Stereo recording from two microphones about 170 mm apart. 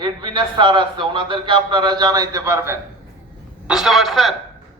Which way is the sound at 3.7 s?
Centre (ahead or behind).